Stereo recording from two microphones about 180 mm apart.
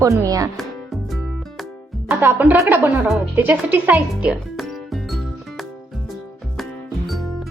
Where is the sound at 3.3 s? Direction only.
10° right (ahead or behind).